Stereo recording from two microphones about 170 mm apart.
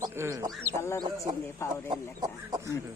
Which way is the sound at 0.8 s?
15° left (ahead or behind).